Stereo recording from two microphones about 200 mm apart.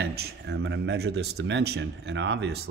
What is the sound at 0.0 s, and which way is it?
Speech, 55° right (ahead or behind).